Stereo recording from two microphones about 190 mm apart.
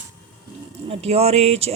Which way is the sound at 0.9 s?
30° right (ahead or behind).